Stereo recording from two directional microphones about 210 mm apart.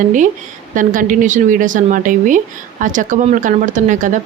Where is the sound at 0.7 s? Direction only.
40° right (ahead or behind).